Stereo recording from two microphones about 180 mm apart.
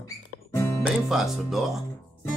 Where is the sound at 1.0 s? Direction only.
Centre (ahead or behind).